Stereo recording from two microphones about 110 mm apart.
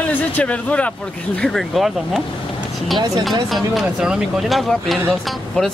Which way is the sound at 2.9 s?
35° right (ahead or behind).